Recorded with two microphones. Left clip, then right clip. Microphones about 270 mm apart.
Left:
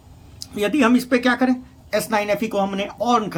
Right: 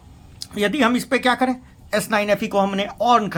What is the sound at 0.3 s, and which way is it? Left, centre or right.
Speech, centre.